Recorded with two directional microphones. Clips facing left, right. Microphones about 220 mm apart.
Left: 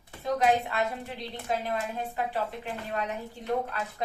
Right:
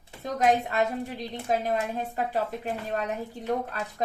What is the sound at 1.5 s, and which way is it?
A woman's voice, 40° right (ahead or behind).